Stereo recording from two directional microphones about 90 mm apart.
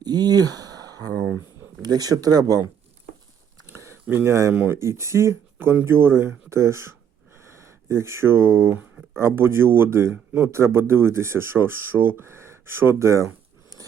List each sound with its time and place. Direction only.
0.0 s a sound: 50° right (ahead or behind)
1.8 s speech: 45° right (ahead or behind)
4.1 s speech: 30° right (ahead or behind)
4.5 s speech: 20° right (ahead or behind)
4.8 s speech: 30° right (ahead or behind)
13.7 s a sound: 45° right (ahead or behind)